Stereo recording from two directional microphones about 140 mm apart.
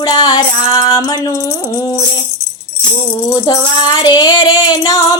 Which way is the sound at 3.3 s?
30° left (ahead or behind).